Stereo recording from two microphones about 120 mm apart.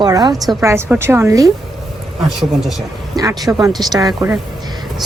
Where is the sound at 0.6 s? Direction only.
20° right (ahead or behind).